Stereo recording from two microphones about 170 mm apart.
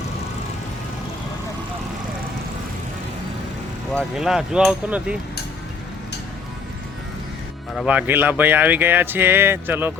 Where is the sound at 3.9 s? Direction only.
Centre (ahead or behind).